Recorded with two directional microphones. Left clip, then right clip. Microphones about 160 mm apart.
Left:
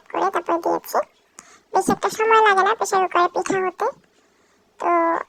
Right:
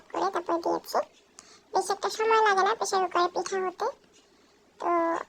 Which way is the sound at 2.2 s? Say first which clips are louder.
Left 7 dB; 10° left (ahead or behind).